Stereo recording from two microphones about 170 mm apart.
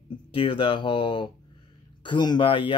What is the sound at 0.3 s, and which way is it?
Speech, 30° left (ahead or behind).